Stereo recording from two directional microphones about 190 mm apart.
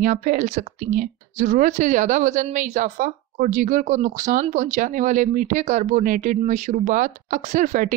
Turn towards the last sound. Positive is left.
turn(degrees=-40)  # may be behind; listen again after turning